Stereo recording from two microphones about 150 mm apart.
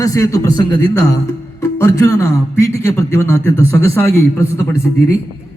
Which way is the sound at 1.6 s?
20° left (ahead or behind).